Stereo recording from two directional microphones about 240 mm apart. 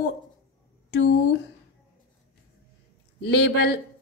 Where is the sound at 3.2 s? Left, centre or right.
Left.